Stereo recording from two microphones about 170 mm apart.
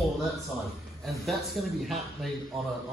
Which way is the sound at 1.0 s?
Centre (ahead or behind).